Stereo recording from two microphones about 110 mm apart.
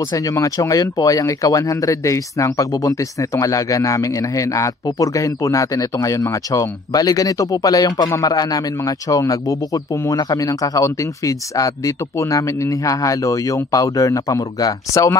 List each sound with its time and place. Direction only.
0.1 s speech: 30° left (ahead or behind)